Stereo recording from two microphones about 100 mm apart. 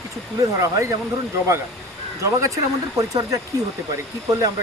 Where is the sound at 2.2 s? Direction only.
30° right (ahead or behind).